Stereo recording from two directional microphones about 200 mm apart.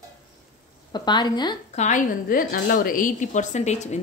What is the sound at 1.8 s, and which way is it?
A woman's voice, 40° left (ahead or behind).